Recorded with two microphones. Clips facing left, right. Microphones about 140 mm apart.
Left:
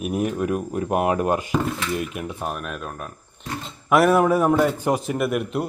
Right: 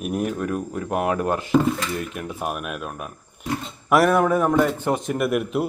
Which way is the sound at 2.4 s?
10° right (ahead or behind).